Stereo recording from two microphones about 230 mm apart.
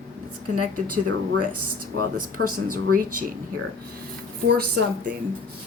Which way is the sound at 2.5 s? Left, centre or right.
Right.